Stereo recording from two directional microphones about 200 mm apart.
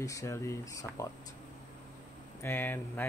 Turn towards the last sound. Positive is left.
turn(degrees=10)  # may be behind; listen again after turning